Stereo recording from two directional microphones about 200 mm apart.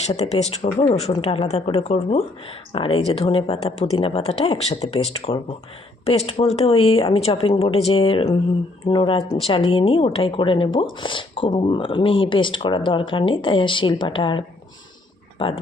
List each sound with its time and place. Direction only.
0.1 s speech: 35° left (ahead or behind)